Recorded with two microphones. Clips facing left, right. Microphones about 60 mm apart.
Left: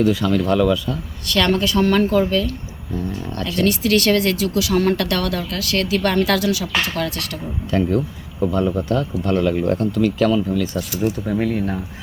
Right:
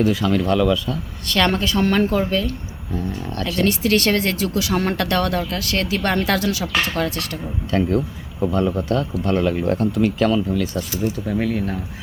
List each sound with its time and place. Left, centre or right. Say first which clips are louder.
0.0 s speech: left 1 dB; centre
1.3 s speech: left 1 dB; right
3.1 s speech: even; centre
3.6 s speech: left 1 dB; right
7.7 s speech: left 1 dB; centre
9.3 s speech: left 1 dB; centre